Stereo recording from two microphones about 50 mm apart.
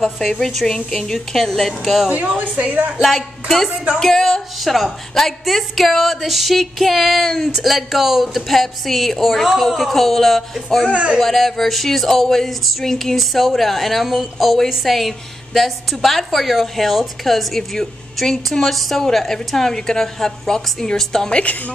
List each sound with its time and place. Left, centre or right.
0.2 s a woman's voice: centre
2.0 s a woman's voice: right
3.0 s a woman's voice: centre
10.8 s a woman's voice: right
11.1 s a woman's voice: centre
21.3 s a woman's voice: left